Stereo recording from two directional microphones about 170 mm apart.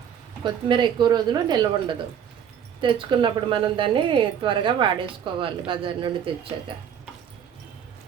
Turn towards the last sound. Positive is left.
turn(degrees=-30)  # may be behind; listen again after turning